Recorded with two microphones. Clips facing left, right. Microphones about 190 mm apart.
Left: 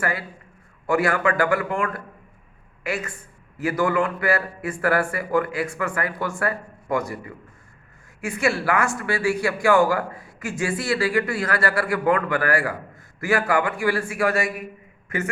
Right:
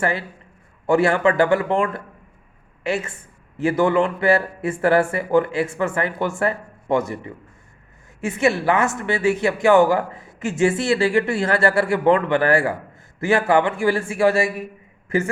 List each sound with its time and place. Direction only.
0.0 s a woman's voice: 25° right (ahead or behind)